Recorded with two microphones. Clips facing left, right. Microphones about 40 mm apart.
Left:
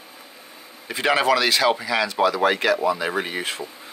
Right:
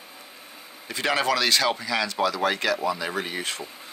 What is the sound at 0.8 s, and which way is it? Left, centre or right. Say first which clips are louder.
Speech: left 5 dB; centre.